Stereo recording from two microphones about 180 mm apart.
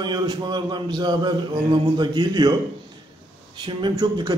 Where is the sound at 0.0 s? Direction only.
25° right (ahead or behind).